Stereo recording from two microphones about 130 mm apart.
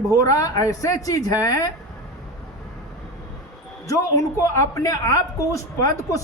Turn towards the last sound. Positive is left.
turn(degrees=25)  # may be behind; listen again after turning